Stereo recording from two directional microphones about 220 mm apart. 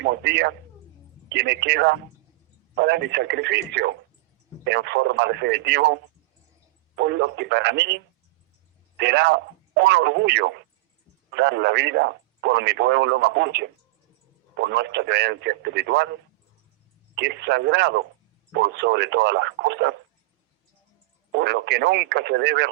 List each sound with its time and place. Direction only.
0.0 s a sound: 50° right (ahead or behind)
1.3 s speech: 50° right (ahead or behind)
17.2 s speech: 50° right (ahead or behind)
21.3 s speech: 50° right (ahead or behind)